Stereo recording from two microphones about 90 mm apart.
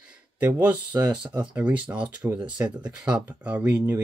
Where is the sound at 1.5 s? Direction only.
15° right (ahead or behind).